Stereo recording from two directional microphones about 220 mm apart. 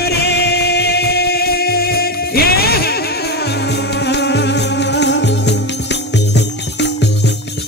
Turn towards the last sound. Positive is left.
turn(degrees=50)  # may be behind; listen again after turning